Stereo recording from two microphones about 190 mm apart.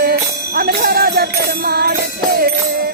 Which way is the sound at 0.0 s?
50° right (ahead or behind).